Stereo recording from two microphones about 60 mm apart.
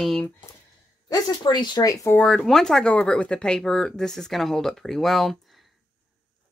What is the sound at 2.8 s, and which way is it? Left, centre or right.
Speech, centre.